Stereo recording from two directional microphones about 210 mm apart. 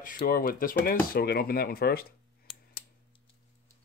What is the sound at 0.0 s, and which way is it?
Speech, 40° left (ahead or behind).